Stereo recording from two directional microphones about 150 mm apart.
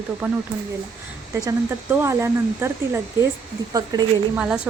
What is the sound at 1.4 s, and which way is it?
A woman's voice, 15° right (ahead or behind).